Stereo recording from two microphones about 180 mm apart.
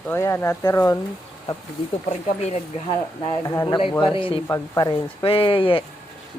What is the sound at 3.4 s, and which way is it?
Speech, 20° left (ahead or behind).